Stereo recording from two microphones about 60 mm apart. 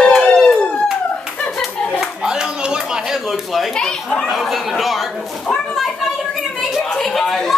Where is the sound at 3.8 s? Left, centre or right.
Centre.